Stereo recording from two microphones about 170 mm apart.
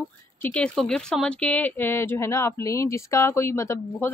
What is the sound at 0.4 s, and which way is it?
A woman's voice, 5° left (ahead or behind).